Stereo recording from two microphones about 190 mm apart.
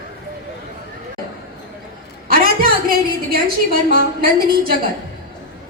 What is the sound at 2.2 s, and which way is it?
A woman's voice, 50° right (ahead or behind).